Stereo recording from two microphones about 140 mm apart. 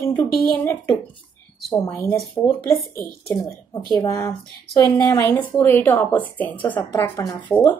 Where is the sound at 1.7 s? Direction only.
20° left (ahead or behind).